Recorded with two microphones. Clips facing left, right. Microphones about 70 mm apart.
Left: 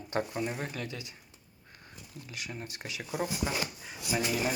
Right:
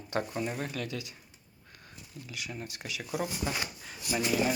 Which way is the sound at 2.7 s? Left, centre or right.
Left.